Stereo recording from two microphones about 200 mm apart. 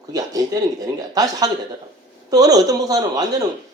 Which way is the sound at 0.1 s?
20° right (ahead or behind).